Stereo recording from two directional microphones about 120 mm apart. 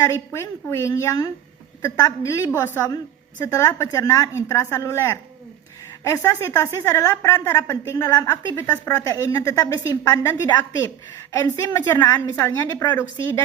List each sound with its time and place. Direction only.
0.3 s a woman's voice: 25° left (ahead or behind)